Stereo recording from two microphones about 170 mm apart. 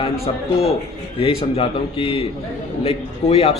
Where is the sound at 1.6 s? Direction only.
35° left (ahead or behind).